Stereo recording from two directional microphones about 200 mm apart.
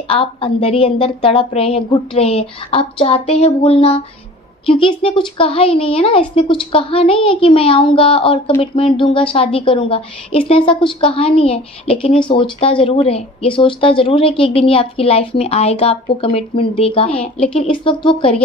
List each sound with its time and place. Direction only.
0.1 s speech: 25° left (ahead or behind)